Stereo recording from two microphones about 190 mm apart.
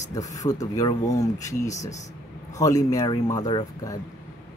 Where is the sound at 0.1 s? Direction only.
15° left (ahead or behind).